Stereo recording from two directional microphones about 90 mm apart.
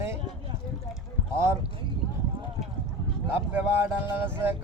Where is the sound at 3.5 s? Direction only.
25° right (ahead or behind).